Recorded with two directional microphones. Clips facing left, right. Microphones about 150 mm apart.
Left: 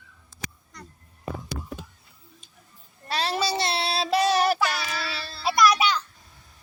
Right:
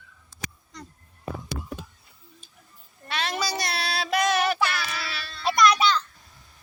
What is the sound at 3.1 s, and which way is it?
Child singing, 35° left (ahead or behind).